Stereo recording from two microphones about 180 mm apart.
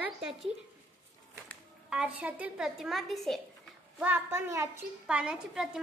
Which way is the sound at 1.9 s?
5° right (ahead or behind).